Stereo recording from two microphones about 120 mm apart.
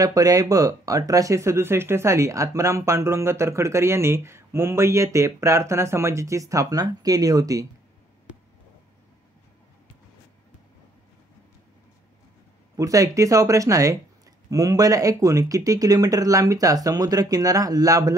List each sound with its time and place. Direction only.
0.0 s speech: 30° right (ahead or behind)
12.7 s speech: 30° right (ahead or behind)